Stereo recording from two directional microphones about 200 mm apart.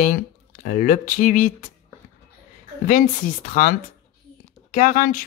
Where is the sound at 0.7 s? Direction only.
40° left (ahead or behind).